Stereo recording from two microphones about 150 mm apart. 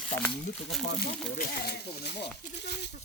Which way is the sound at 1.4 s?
85° left.